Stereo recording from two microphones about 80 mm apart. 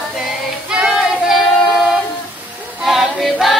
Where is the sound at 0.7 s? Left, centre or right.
Centre.